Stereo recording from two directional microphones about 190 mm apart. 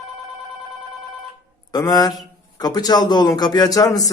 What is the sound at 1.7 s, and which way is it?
A man's voice, 20° left (ahead or behind).